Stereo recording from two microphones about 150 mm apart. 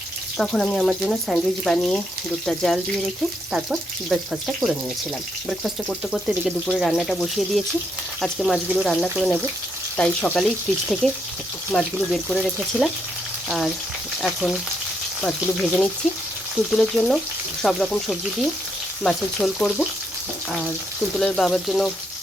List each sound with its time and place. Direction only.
0.3 s speech: 5° left (ahead or behind)
12.7 s frying: 10° right (ahead or behind)
14.2 s speech: centre (ahead or behind)
21.2 s speech: centre (ahead or behind)